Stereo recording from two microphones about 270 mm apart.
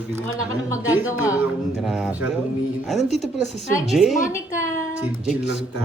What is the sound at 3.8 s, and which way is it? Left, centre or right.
Speech, centre.